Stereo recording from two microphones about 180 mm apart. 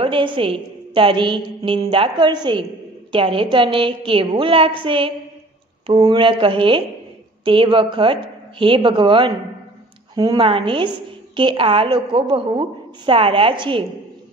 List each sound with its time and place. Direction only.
0.0 s a woman's voice: 30° right (ahead or behind)